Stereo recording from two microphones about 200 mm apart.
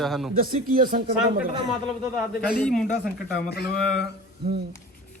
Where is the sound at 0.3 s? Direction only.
45° right (ahead or behind).